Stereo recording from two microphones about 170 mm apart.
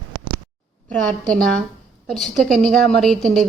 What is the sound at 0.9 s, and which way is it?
A woman's voice, 5° left (ahead or behind).